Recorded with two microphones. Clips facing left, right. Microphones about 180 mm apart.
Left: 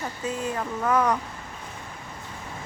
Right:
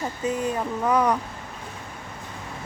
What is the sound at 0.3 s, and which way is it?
Speech, 20° right (ahead or behind).